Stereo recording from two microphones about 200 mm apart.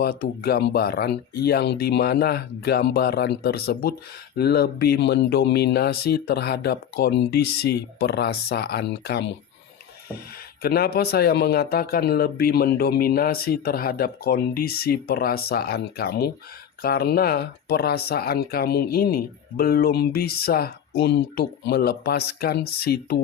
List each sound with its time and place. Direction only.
0.0 s speech: 50° left (ahead or behind)
10.6 s speech: 50° left (ahead or behind)